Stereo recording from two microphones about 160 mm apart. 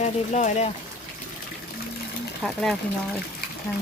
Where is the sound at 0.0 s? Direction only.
45° left (ahead or behind).